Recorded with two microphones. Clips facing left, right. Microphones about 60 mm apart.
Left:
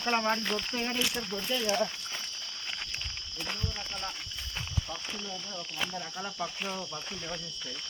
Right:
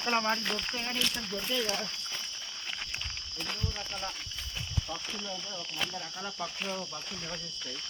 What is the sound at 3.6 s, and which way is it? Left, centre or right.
Speech, centre.